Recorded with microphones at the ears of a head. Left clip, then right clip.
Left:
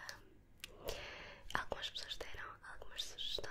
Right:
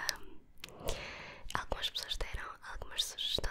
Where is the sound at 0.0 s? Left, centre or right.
Right.